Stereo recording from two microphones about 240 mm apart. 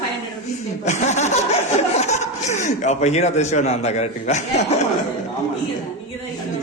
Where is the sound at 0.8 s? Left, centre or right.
Left.